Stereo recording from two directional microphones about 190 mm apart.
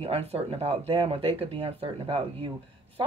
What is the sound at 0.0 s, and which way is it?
Speech, 30° right (ahead or behind).